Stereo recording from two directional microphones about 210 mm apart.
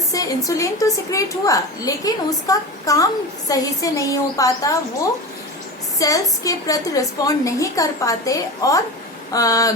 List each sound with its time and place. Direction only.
0.1 s a woman's voice: 15° left (ahead or behind)
6.0 s a woman's voice: 15° left (ahead or behind)